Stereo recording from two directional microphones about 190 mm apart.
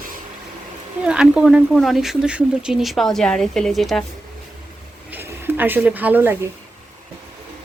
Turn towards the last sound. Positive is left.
turn(degrees=-10)  # may be behind; listen again after turning